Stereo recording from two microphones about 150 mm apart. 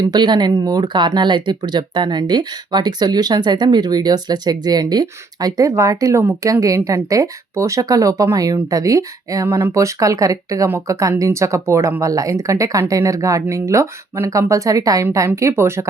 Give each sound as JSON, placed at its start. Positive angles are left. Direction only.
{"t": 0.0, "sound": "speech", "side_deg": -30}